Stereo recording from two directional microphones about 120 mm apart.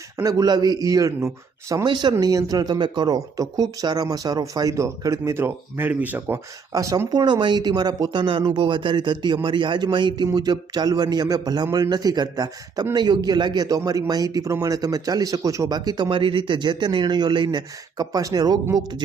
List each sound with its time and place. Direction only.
0.2 s a man's voice: 30° right (ahead or behind)
6.7 s a man's voice: 30° right (ahead or behind)
16.0 s a man's voice: 50° right (ahead or behind)